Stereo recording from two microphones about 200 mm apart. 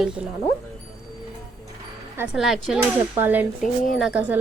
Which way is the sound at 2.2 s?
5° right (ahead or behind).